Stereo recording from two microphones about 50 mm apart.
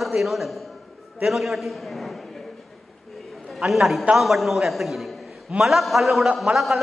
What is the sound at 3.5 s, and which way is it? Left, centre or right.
A man's voice, centre.